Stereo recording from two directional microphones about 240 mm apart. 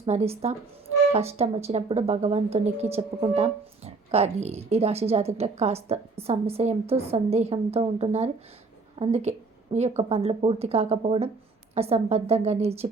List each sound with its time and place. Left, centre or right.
0.0 s speech: right